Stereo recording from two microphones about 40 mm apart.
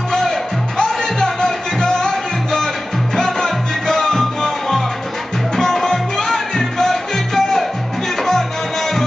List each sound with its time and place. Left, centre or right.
0.1 s music: centre